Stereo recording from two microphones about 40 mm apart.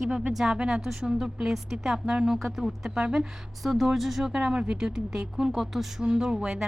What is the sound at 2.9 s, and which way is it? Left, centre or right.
Speech, right.